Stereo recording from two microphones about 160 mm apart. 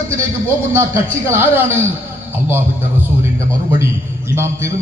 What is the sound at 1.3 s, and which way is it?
Speech, 10° right (ahead or behind).